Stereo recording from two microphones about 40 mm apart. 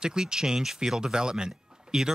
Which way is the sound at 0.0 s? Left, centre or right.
Centre.